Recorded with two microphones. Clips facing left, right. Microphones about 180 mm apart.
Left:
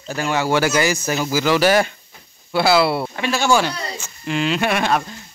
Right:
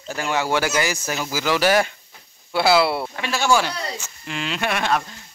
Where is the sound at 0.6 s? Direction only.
10° right (ahead or behind).